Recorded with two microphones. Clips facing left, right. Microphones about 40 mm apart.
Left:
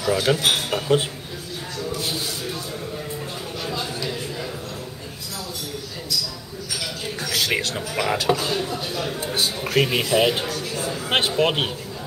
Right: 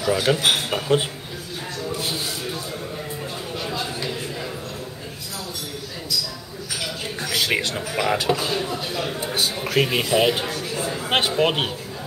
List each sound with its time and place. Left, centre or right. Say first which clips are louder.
0.0 s a man's voice: even; centre
1.8 s a sound: even; right
7.2 s speech: right 1 dB; centre